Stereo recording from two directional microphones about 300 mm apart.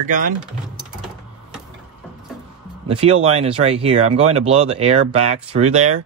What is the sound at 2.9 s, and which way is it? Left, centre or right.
Speech, centre.